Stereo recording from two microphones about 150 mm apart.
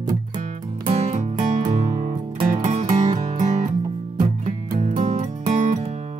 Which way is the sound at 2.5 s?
55° right (ahead or behind).